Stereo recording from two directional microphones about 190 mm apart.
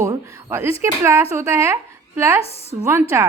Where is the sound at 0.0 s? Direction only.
15° right (ahead or behind).